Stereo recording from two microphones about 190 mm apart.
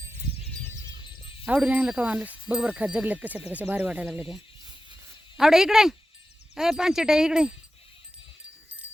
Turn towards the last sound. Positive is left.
turn(degrees=-5)  # may be behind; listen again after turning